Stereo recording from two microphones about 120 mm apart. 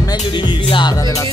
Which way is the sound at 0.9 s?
25° left (ahead or behind).